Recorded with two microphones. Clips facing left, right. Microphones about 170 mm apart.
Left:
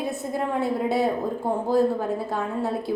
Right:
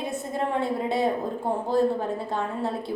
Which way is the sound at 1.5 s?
25° right (ahead or behind).